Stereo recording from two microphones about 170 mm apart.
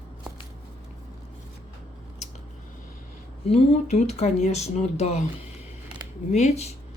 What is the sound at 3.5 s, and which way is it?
A woman's voice, 40° left (ahead or behind).